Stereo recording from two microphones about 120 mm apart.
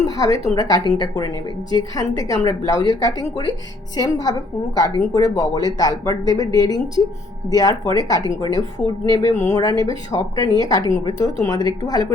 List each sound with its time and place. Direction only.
0.0 s a woman's voice: 30° left (ahead or behind)